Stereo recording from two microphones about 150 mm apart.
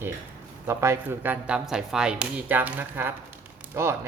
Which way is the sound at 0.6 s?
15° right (ahead or behind).